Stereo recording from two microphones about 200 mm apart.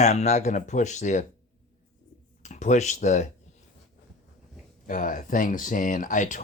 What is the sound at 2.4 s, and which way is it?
Speech, 35° left (ahead or behind).